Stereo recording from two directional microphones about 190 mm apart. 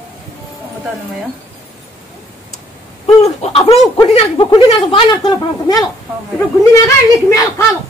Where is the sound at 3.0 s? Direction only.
30° left (ahead or behind).